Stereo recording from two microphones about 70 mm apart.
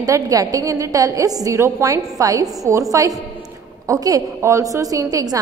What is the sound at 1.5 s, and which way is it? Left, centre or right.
A woman's voice, right.